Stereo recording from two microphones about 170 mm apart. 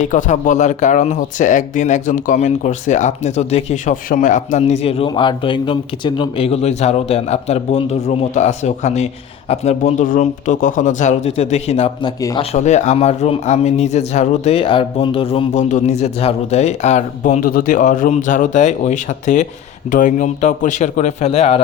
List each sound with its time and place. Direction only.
0.0 s speech: 45° left (ahead or behind)
12.0 s speech: 25° left (ahead or behind)
12.5 s speech: 45° left (ahead or behind)
17.4 s speech: 55° left (ahead or behind); by 21.6 s 40° left (ahead or behind)